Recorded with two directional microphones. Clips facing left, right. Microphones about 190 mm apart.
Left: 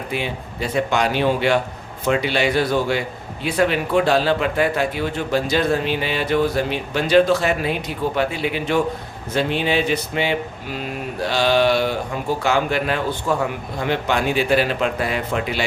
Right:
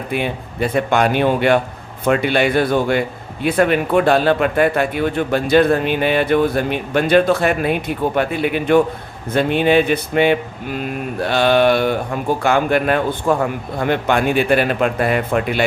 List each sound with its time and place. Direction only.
0.1 s a man's voice: 55° right (ahead or behind)